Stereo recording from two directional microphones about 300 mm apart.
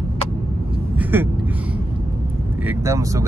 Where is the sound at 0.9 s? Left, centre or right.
Centre.